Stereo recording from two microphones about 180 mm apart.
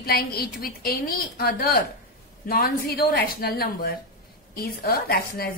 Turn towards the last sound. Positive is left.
turn(degrees=60)  # may be behind; listen again after turning